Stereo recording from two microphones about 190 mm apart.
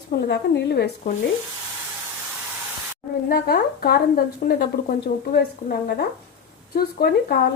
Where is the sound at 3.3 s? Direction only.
55° left (ahead or behind).